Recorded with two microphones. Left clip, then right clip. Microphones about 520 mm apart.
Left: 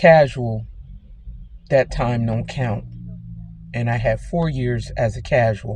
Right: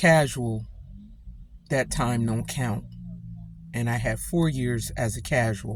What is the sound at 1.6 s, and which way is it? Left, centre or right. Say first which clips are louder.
Speech: left 8 dB; right.